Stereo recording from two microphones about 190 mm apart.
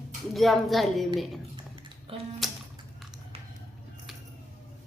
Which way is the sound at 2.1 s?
30° right (ahead or behind).